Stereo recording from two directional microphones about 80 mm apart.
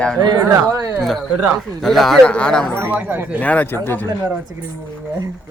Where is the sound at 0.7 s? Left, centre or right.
Right.